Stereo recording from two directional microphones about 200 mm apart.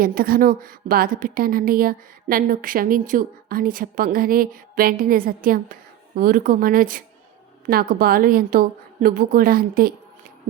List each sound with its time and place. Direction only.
0.0 s a woman's voice: 45° right (ahead or behind)